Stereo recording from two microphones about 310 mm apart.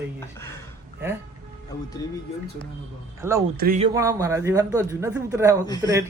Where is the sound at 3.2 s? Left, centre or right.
Centre.